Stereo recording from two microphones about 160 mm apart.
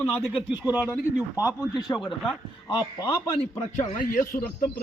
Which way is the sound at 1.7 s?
25° left (ahead or behind).